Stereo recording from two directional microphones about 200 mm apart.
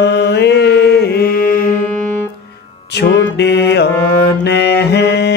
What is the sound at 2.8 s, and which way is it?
Music, 55° left (ahead or behind).